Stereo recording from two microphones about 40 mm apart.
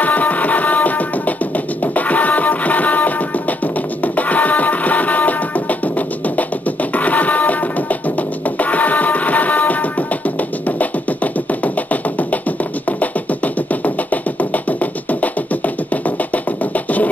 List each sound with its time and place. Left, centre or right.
0.0 s music: left
11.6 s music: left